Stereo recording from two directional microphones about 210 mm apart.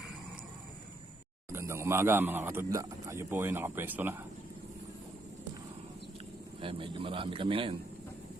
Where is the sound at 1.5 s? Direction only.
10° right (ahead or behind).